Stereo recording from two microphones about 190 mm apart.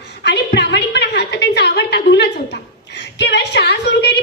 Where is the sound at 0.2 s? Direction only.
65° left (ahead or behind).